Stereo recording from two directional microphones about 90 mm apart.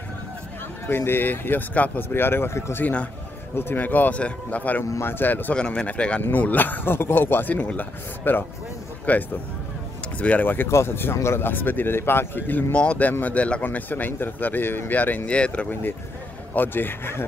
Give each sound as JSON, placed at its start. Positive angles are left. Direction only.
{"t": 0.8, "sound": "a man's voice", "side_deg": 25}